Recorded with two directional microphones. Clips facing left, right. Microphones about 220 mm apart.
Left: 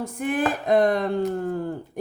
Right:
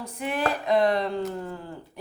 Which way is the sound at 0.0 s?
50° left (ahead or behind).